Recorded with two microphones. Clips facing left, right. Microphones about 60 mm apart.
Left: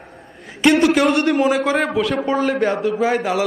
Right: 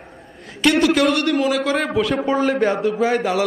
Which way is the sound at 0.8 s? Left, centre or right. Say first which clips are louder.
Left 1 dB; centre.